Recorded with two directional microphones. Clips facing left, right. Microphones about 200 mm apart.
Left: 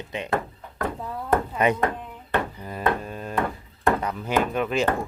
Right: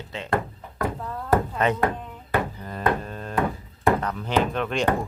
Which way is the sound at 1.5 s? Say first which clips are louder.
Left 1 dB; 10° left (ahead or behind).